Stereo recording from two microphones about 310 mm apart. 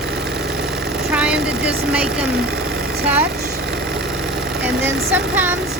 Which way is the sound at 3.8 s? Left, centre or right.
Right.